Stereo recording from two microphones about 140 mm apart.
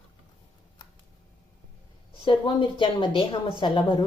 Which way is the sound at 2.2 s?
35° left (ahead or behind).